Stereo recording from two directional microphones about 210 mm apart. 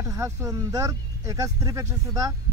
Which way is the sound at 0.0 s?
15° right (ahead or behind).